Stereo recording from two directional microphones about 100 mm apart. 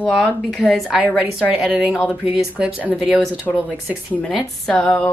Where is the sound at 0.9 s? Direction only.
10° right (ahead or behind).